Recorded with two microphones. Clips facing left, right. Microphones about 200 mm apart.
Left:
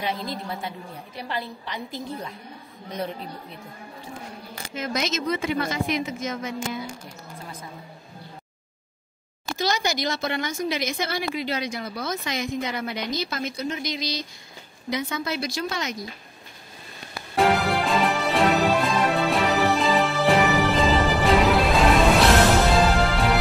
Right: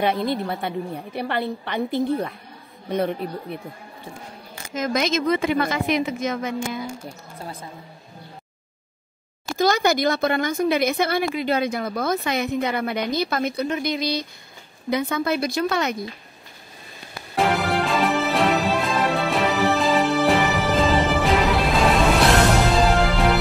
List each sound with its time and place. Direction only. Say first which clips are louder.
0.0 s a woman's voice: right 8 dB; 60° right (ahead or behind)
4.7 s a woman's voice: right 5 dB; 50° right (ahead or behind)
9.6 s a woman's voice: right 7 dB; 55° right (ahead or behind)
17.4 s music: even; centre (ahead or behind)
22.8 s music: right 3 dB; centre (ahead or behind)